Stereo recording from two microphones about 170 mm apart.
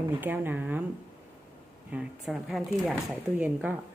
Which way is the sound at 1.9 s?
5° right (ahead or behind).